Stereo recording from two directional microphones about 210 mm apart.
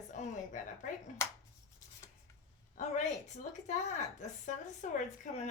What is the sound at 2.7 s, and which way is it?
A woman's voice, 35° left (ahead or behind).